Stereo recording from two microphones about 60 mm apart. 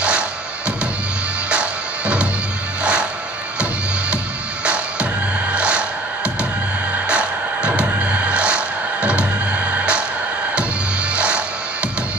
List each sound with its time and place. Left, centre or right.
1.5 s music: centre
5.5 s music: centre
11.1 s music: centre